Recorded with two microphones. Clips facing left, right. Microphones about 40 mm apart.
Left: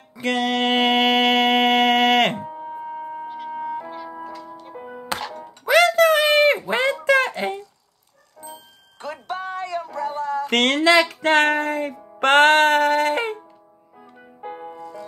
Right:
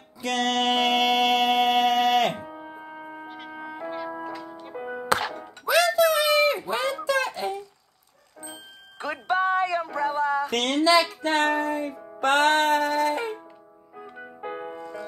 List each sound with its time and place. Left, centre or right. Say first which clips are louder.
0.4 s music: left 2 dB; centre; by 2.3 s left
2.3 s music: left 6 dB; centre
5.7 s a sound: left 5 dB; left
8.4 s music: left 2 dB; centre
10.5 s music: left 6 dB; left
12.2 s music: left 6 dB; left
13.9 s music: right 5 dB; centre